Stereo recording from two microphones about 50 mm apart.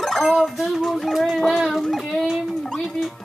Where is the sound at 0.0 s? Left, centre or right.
Centre.